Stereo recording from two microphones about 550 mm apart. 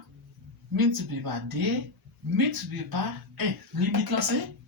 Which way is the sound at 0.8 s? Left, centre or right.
Right.